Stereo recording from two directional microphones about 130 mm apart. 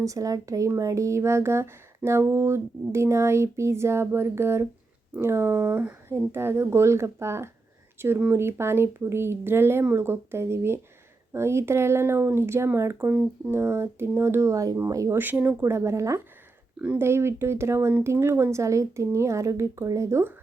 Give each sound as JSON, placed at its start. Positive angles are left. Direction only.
{"t": 0.0, "sound": "speech", "side_deg": -25}